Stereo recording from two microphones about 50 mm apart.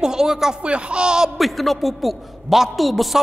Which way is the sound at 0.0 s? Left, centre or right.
Centre.